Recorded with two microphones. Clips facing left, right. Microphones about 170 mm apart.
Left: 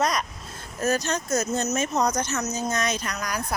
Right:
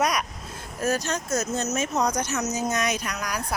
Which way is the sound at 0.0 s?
10° right (ahead or behind).